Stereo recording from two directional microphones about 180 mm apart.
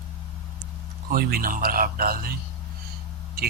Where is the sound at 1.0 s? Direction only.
55° right (ahead or behind).